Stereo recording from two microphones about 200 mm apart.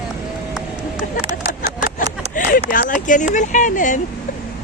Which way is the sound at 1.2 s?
20° right (ahead or behind).